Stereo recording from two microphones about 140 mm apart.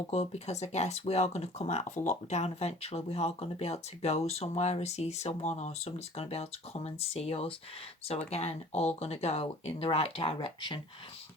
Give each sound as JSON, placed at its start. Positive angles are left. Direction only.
{"t": 0.1, "sound": "speech", "side_deg": 50}